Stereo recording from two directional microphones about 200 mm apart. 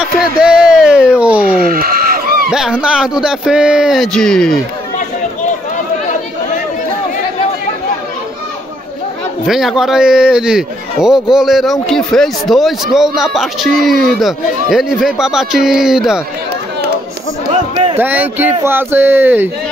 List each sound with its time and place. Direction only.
0.0 s a sound: 5° right (ahead or behind)
1.6 s goat: 45° right (ahead or behind)
2.5 s a man's voice: 5° right (ahead or behind)
9.5 s a man's voice: centre (ahead or behind)
17.9 s speech: 10° right (ahead or behind)